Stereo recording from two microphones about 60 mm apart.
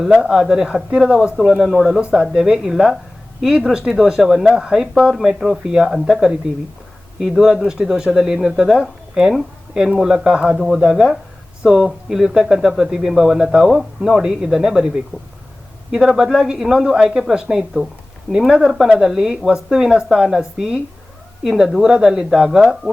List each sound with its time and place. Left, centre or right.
0.0 s speech: centre
2.0 s speech: centre